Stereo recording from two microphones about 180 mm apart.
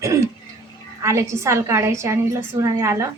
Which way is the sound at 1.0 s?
15° right (ahead or behind).